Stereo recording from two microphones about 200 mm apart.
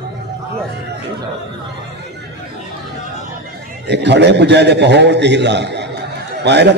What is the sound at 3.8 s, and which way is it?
A man's voice, 60° right (ahead or behind).